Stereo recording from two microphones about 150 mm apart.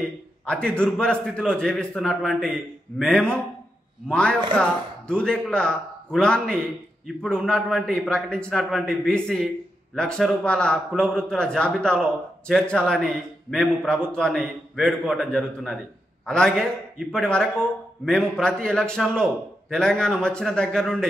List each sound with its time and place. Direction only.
0.5 s a man's voice: 5° left (ahead or behind)